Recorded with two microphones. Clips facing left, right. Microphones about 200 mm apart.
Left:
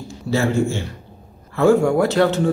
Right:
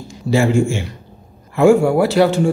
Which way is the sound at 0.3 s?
15° right (ahead or behind).